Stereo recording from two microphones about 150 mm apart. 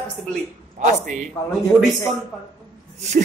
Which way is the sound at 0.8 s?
55° right (ahead or behind).